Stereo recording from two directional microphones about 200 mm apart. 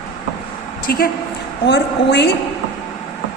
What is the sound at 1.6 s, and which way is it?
Speech, 60° left (ahead or behind).